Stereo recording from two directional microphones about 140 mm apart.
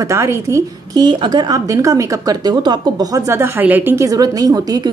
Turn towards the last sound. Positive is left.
turn(degrees=-25)  # may be behind; listen again after turning